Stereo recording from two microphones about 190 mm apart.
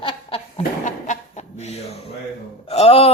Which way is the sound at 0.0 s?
30° left (ahead or behind).